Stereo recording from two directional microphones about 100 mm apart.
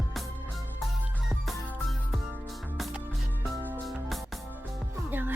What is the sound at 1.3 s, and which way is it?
Music, centre (ahead or behind).